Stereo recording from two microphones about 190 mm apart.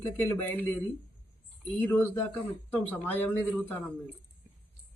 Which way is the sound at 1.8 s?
10° left (ahead or behind).